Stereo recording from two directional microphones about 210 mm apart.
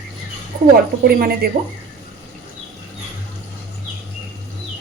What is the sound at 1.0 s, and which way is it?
Speech, 45° right (ahead or behind).